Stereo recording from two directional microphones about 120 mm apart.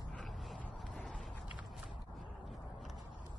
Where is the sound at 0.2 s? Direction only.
Centre (ahead or behind).